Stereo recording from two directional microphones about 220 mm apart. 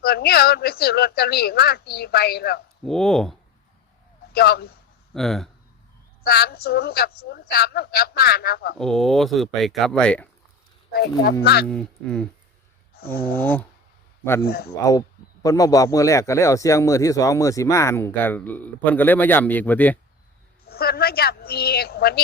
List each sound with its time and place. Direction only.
0.0 s a woman's voice: 45° left (ahead or behind)
2.8 s speech: centre (ahead or behind)
4.3 s a man's voice: 45° left (ahead or behind)
5.1 s speech: centre (ahead or behind)
6.2 s a woman's voice: 45° left (ahead or behind)
8.8 s speech: centre (ahead or behind)
10.9 s a woman's voice: 45° left (ahead or behind)
11.7 s a man's voice: 5° left (ahead or behind)
14.4 s a woman's voice: 45° left (ahead or behind)
15.4 s a man's voice: 15° left (ahead or behind)
20.7 s a woman's voice: 45° left (ahead or behind)